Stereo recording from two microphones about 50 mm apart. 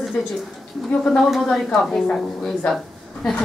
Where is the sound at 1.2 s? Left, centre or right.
Centre.